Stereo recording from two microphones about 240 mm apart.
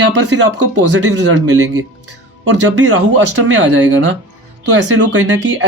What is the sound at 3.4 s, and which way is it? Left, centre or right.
Speech, right.